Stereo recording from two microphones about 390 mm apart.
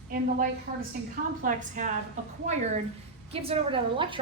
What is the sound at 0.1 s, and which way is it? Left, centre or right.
A woman's voice, right.